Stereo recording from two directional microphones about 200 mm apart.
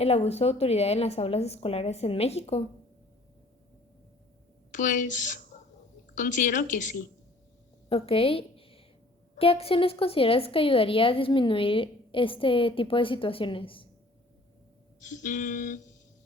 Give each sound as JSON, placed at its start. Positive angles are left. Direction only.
{"t": 0.0, "sound": "a woman's voice", "side_deg": 30}
{"t": 4.7, "sound": "a woman's voice", "side_deg": 40}
{"t": 7.9, "sound": "a woman's voice", "side_deg": 30}
{"t": 15.0, "sound": "a woman's voice", "side_deg": 40}